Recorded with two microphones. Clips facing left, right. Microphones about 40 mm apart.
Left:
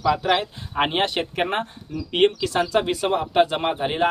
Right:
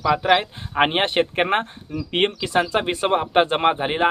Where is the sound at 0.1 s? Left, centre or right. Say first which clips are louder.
Right 3 dB; right.